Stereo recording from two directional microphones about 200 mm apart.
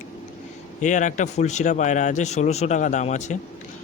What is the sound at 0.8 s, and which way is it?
Speech, 40° left (ahead or behind).